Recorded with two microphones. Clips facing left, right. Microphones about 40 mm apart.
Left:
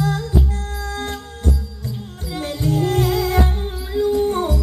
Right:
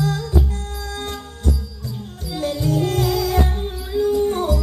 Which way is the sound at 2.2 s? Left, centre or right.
Left.